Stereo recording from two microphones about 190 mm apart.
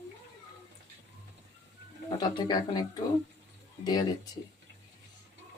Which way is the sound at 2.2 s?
20° left (ahead or behind).